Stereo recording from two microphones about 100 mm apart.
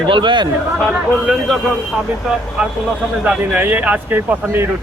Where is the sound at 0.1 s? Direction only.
50° right (ahead or behind).